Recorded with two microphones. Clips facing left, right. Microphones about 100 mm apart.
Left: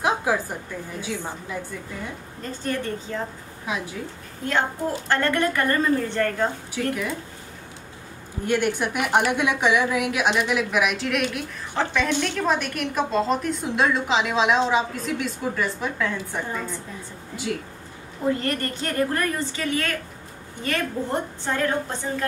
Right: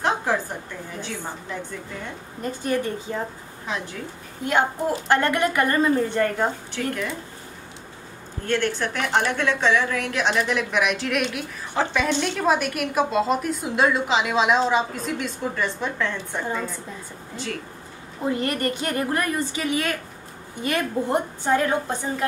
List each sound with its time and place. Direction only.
0.0 s a sound: 5° left (ahead or behind)
1.0 s a woman's voice: 5° left (ahead or behind)
2.4 s a woman's voice: 15° right (ahead or behind)
3.6 s a woman's voice: 5° left (ahead or behind)
4.5 s a woman's voice: 15° right (ahead or behind)
6.8 s a woman's voice: 5° left (ahead or behind)
8.5 s a woman's voice: 10° left (ahead or behind)
18.2 s a woman's voice: 15° right (ahead or behind)